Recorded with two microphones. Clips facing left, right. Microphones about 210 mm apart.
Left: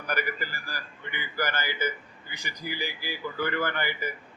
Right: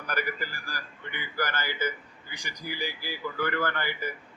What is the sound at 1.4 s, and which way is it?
A man's voice, 10° left (ahead or behind).